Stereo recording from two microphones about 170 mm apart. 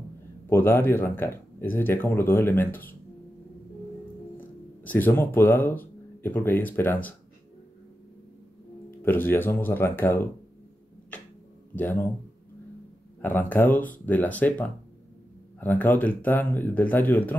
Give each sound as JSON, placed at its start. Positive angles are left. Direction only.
{"t": 0.5, "sound": "speech", "side_deg": 15}
{"t": 4.4, "sound": "speech", "side_deg": 10}
{"t": 9.0, "sound": "speech", "side_deg": 10}
{"t": 11.7, "sound": "speech", "side_deg": 10}
{"t": 13.2, "sound": "speech", "side_deg": 10}